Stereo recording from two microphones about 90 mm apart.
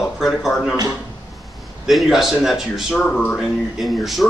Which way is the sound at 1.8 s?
Centre (ahead or behind).